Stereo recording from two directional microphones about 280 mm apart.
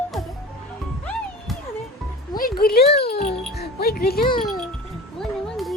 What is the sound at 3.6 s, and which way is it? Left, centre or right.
Music, left.